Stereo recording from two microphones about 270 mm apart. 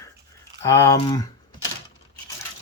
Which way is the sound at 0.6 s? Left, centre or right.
Centre.